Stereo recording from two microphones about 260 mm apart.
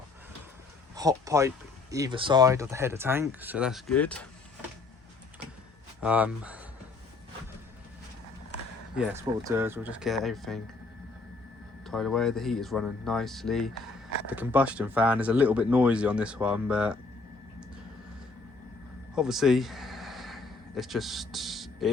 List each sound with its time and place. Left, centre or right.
0.9 s speech: centre
6.0 s speech: centre
9.0 s speech: centre
11.9 s speech: centre
19.1 s a sound: centre